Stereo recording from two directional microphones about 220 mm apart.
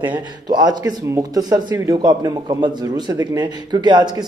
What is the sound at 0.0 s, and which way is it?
Speech, 20° right (ahead or behind).